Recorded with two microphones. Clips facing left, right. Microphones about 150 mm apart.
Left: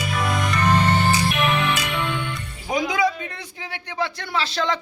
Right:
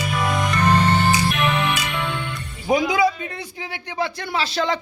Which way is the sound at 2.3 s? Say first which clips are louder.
Right 5 dB; 5° right (ahead or behind).